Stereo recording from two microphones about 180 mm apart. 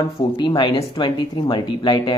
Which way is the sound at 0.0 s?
25° left (ahead or behind).